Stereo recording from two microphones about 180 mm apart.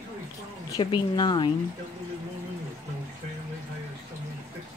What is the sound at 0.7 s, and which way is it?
Speech, 25° left (ahead or behind).